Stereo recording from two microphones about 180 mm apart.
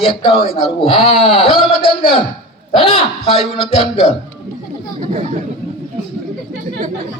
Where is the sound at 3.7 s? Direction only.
35° left (ahead or behind).